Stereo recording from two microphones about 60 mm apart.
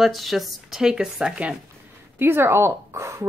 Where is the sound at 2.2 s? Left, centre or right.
Right.